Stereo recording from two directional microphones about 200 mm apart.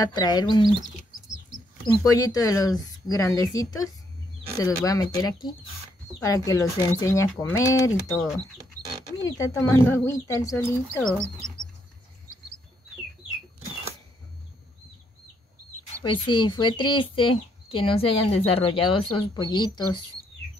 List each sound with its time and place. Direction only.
0.0 s speech: 20° left (ahead or behind)
1.9 s speech: 15° left (ahead or behind)
9.2 s speech: 15° left (ahead or behind)
16.1 s speech: 25° left (ahead or behind)